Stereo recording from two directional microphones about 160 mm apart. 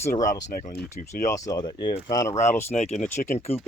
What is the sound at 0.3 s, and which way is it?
Speech, 50° left (ahead or behind).